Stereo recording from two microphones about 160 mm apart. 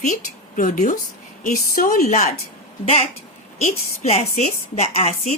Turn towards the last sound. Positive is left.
turn(degrees=40)  # may be behind; listen again after turning